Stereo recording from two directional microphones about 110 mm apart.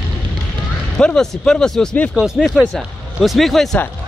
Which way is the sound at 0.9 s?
5° left (ahead or behind).